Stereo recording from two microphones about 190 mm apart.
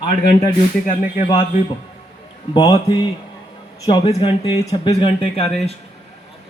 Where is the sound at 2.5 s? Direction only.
20° left (ahead or behind).